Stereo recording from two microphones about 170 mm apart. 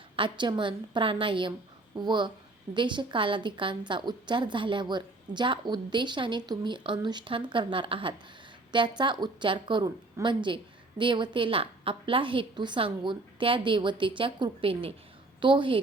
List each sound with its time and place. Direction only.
0.2 s a woman's voice: 25° right (ahead or behind)